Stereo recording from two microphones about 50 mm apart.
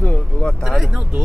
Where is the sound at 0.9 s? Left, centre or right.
Centre.